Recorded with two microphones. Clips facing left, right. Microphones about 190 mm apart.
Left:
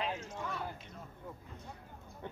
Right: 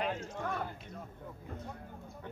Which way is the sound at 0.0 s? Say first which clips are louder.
Right 3 dB; 55° right (ahead or behind).